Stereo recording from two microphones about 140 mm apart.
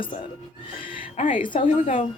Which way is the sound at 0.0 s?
40° left (ahead or behind).